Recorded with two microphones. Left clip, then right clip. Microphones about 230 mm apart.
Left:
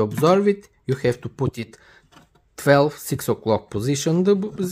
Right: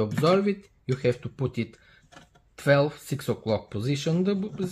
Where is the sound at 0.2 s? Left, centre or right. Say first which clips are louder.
Left 6 dB; left.